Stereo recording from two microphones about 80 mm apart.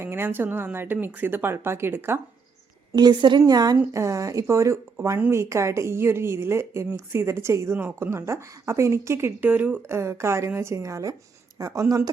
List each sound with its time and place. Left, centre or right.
0.0 s speech: right
2.9 s speech: right
3.9 s a woman's voice: right
9.5 s speech: right
9.9 s a woman's voice: right